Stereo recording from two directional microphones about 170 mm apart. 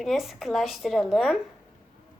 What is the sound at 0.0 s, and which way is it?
Speech, centre (ahead or behind).